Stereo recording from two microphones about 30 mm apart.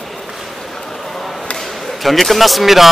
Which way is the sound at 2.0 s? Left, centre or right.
Centre.